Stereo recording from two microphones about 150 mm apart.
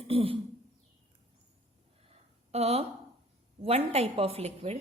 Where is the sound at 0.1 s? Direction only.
40° right (ahead or behind).